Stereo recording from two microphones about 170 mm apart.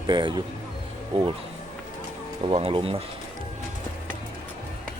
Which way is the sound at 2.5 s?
35° right (ahead or behind).